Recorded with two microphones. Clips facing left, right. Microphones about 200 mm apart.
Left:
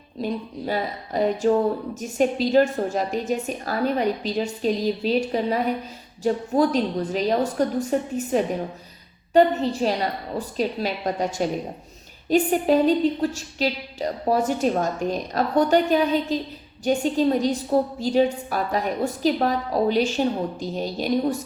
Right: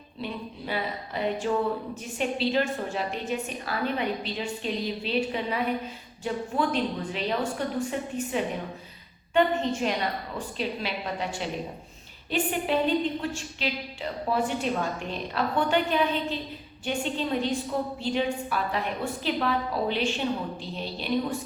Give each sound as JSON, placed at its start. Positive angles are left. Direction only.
{"t": 0.2, "sound": "a woman's voice", "side_deg": 40}